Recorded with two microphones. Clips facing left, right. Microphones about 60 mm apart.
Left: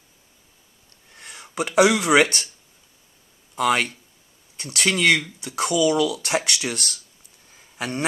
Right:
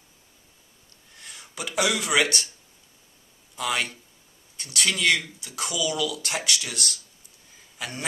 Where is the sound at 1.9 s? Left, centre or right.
Left.